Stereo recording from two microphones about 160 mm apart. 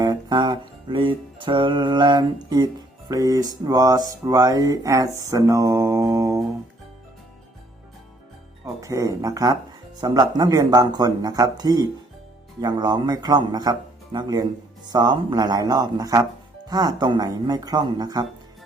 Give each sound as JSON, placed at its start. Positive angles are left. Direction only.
{"t": 0.0, "sound": "music", "side_deg": -25}
{"t": 3.1, "sound": "speech", "side_deg": -20}
{"t": 8.6, "sound": "speech", "side_deg": -20}